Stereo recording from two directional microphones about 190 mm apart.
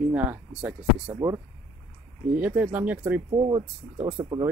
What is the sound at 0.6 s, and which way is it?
Speech, 5° right (ahead or behind).